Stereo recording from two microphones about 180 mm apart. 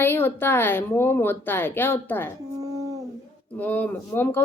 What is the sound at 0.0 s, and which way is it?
A woman's voice, 10° left (ahead or behind).